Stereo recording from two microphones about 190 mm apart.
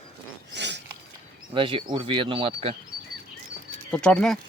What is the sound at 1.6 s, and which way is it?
Speech, 25° right (ahead or behind).